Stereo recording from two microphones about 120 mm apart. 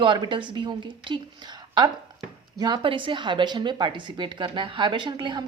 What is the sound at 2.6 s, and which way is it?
A woman's voice, 40° right (ahead or behind).